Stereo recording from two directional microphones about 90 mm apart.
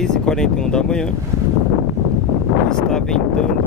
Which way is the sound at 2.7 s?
5° left (ahead or behind).